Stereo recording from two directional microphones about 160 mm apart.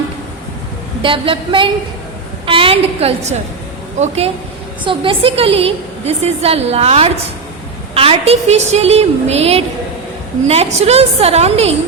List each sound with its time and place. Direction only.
1.0 s a woman's voice: 35° right (ahead or behind)
4.8 s a woman's voice: 30° right (ahead or behind)